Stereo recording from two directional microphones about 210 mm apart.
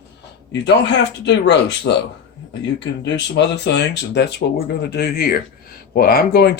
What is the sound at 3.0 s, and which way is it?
Speech, 55° left (ahead or behind).